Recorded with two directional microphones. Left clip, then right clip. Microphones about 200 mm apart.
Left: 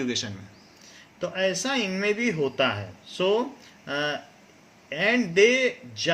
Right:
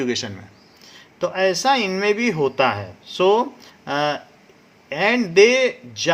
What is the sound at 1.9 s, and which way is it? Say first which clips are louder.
Speech: right 6 dB; 50° right (ahead or behind).